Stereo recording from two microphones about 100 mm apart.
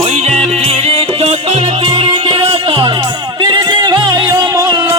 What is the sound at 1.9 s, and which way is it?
Music, 60° right (ahead or behind).